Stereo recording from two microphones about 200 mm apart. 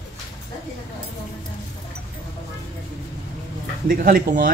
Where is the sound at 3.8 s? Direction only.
45° right (ahead or behind).